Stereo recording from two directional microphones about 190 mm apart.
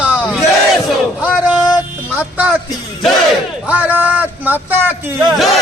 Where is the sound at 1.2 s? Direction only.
5° right (ahead or behind).